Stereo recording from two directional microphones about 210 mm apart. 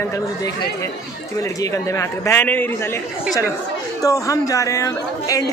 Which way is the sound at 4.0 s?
15° left (ahead or behind).